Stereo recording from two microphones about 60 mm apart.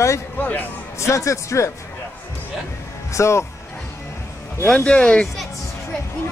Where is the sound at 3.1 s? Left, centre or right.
Left.